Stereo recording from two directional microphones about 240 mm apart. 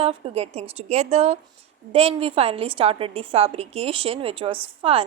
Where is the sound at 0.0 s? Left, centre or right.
Right.